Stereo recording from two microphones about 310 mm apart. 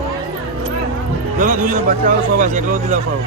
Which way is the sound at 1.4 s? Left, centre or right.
Right.